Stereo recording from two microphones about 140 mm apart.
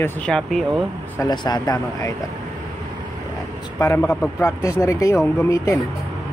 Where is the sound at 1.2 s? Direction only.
30° left (ahead or behind).